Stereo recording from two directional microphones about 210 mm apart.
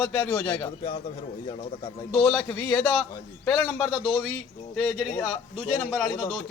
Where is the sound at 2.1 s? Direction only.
Centre (ahead or behind).